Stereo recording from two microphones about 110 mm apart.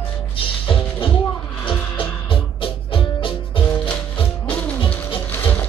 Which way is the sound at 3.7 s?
15° left (ahead or behind).